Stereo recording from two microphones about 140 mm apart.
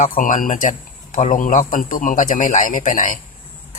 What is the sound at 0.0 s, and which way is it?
A man's voice, 70° left (ahead or behind).